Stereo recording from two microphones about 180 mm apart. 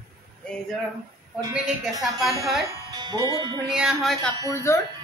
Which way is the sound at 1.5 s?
Centre (ahead or behind).